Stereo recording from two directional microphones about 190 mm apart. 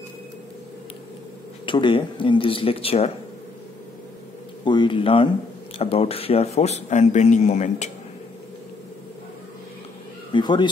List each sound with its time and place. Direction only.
1.7 s speech: 25° left (ahead or behind)
4.6 s speech: 25° left (ahead or behind)
10.3 s speech: 25° left (ahead or behind)